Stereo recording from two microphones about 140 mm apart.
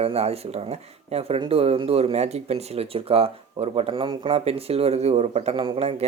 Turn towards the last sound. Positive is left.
turn(degrees=-45)  # may be behind; listen again after turning